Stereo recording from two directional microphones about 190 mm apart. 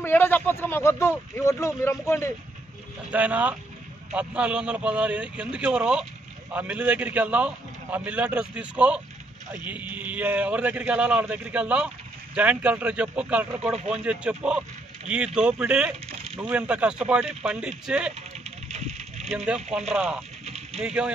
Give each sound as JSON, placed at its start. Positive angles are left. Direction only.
{"t": 0.0, "sound": "speech", "side_deg": 10}
{"t": 3.1, "sound": "a man's voice", "side_deg": -5}
{"t": 18.7, "sound": "a sound", "side_deg": -35}
{"t": 19.3, "sound": "a man's voice", "side_deg": -5}
{"t": 20.4, "sound": "a sound", "side_deg": -35}
{"t": 20.8, "sound": "a man's voice", "side_deg": -5}